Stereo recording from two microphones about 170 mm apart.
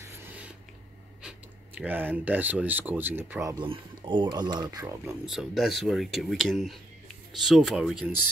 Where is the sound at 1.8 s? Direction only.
10° right (ahead or behind).